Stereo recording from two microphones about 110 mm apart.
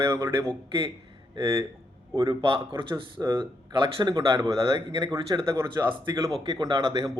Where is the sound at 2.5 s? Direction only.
45° right (ahead or behind).